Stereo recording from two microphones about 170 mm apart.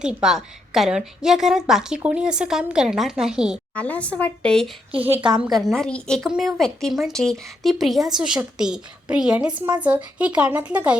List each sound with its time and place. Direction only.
0.0 s a woman's voice: 5° right (ahead or behind)
3.8 s a woman's voice: 10° left (ahead or behind)
4.9 s a woman's voice: 35° right (ahead or behind)
5.5 s a woman's voice: centre (ahead or behind)